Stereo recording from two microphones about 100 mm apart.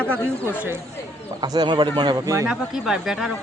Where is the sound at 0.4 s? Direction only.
20° right (ahead or behind).